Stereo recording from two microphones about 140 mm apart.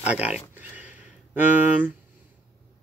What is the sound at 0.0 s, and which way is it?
Speech, 10° right (ahead or behind).